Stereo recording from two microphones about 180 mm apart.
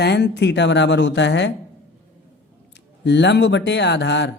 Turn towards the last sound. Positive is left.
turn(degrees=75)  # may be behind; listen again after turning